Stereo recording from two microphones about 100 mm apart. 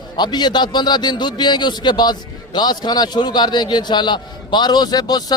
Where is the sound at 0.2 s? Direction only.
45° left (ahead or behind).